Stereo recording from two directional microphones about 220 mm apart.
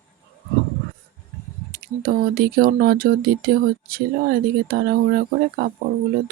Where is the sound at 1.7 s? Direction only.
45° right (ahead or behind).